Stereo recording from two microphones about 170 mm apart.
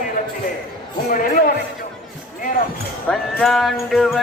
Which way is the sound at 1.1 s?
55° left (ahead or behind).